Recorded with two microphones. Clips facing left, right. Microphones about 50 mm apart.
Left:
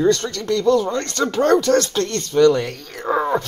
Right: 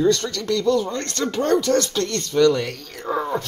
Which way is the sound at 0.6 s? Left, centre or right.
Left.